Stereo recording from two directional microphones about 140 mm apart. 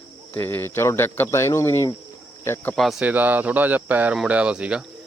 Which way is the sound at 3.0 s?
10° right (ahead or behind).